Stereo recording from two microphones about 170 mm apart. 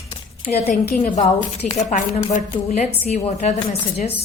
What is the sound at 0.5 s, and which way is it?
Speech, 40° left (ahead or behind).